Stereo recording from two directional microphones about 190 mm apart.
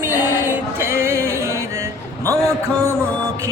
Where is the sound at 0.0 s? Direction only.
10° right (ahead or behind).